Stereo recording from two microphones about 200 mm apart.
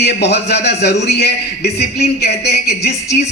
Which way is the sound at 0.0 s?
55° left (ahead or behind).